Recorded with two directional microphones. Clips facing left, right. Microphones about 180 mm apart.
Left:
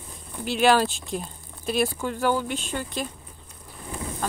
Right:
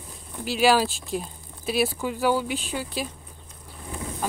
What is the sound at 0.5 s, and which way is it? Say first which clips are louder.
Speech: even; 5° right (ahead or behind).